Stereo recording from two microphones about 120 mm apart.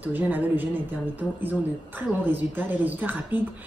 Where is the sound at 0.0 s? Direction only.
15° right (ahead or behind).